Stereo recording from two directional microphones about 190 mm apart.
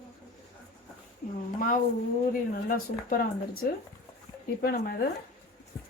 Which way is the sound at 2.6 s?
50° left (ahead or behind).